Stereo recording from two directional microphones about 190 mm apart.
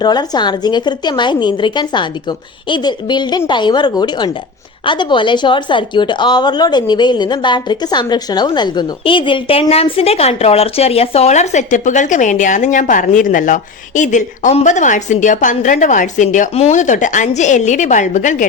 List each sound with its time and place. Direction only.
0.0 s a woman's voice: 20° left (ahead or behind); by 18.4 s 40° left (ahead or behind)